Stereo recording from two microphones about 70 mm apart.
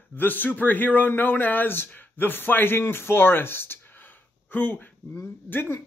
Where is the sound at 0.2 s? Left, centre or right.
Left.